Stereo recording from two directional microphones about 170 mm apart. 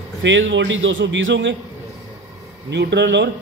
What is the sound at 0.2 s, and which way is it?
A man's voice, 90° right.